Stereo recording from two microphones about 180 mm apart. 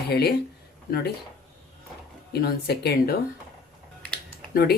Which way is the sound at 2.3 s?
60° left (ahead or behind).